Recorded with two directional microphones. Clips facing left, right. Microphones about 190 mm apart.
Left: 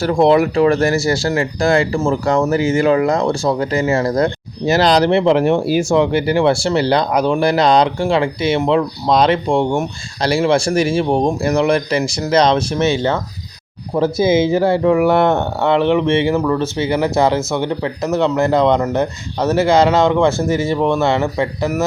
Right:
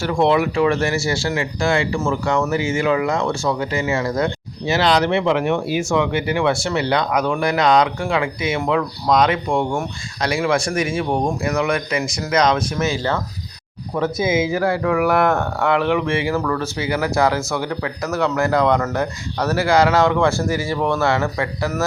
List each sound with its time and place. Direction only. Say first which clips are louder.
0.0 s speech: left 5 dB; 35° left (ahead or behind); by 21.8 s 15° left (ahead or behind)